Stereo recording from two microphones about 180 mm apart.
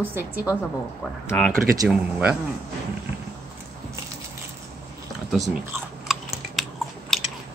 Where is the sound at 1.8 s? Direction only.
5° right (ahead or behind).